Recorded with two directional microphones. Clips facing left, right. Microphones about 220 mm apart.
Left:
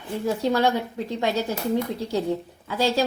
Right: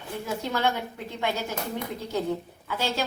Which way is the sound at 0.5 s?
35° left (ahead or behind).